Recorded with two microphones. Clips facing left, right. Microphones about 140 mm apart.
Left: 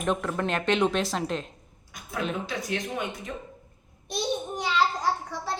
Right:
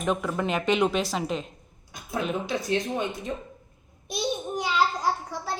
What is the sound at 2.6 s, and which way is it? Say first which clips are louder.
Speech: right 4 dB; 25° right (ahead or behind).